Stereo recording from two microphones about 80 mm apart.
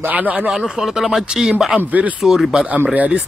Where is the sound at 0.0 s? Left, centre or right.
Centre.